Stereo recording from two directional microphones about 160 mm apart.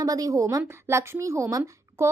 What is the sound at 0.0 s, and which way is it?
A woman's voice, 20° right (ahead or behind).